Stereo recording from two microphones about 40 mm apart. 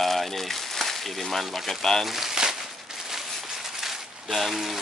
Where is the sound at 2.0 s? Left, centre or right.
Centre.